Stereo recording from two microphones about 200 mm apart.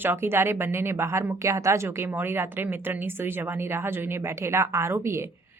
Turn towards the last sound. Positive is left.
turn(degrees=-10)  # may be behind; listen again after turning